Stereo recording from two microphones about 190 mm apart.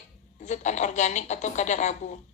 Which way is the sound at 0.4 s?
40° left (ahead or behind).